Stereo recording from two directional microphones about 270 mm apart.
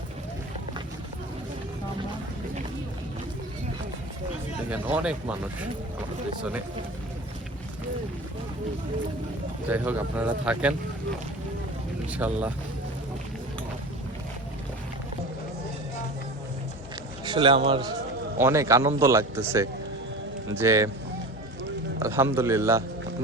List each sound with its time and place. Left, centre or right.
4.7 s speech: centre
9.6 s speech: centre
12.1 s speech: centre
17.2 s a man's voice: centre
21.9 s a man's voice: centre